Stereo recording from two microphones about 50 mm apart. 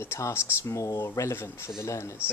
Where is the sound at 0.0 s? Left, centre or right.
Left.